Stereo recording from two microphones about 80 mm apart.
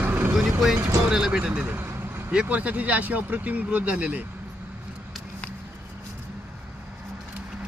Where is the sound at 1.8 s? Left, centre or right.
Right.